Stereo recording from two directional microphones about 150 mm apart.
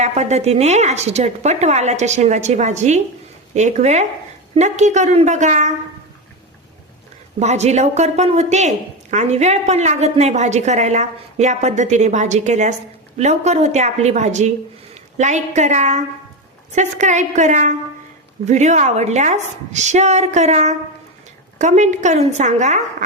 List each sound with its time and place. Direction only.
0.0 s speech: 50° right (ahead or behind)
7.3 s speech: 50° right (ahead or behind)